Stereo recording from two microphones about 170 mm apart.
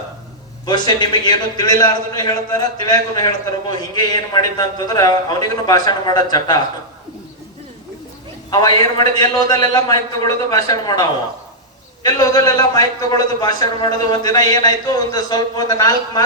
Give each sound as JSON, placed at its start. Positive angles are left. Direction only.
{"t": 0.6, "sound": "a man's voice", "side_deg": 25}
{"t": 8.4, "sound": "a man's voice", "side_deg": 25}
{"t": 12.0, "sound": "a man's voice", "side_deg": 25}